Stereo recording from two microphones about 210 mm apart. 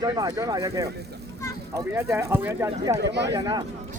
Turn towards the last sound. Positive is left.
turn(degrees=-20)  # may be behind; listen again after turning